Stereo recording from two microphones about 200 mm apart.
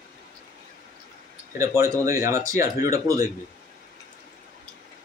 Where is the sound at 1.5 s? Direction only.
15° right (ahead or behind).